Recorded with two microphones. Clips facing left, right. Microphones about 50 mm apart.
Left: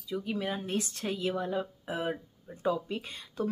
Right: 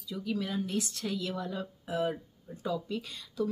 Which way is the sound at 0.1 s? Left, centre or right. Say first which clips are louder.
Left 1 dB; left.